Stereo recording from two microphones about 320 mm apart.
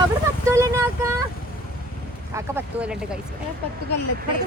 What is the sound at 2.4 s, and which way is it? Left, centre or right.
Speech, centre.